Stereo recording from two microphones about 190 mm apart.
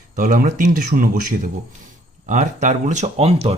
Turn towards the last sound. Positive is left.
turn(degrees=-35)  # may be behind; listen again after turning